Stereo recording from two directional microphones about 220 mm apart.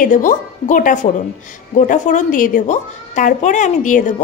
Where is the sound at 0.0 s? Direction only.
35° left (ahead or behind).